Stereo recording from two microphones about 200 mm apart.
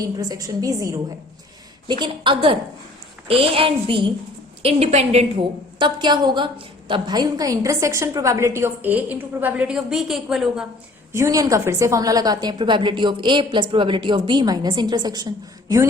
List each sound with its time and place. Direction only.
0.2 s a woman's voice: 20° right (ahead or behind)
5.8 s a woman's voice: 20° right (ahead or behind); by 10.7 s centre (ahead or behind)
11.1 s a woman's voice: 15° right (ahead or behind)